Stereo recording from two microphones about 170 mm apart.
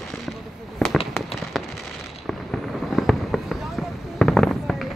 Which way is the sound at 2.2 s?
Centre (ahead or behind).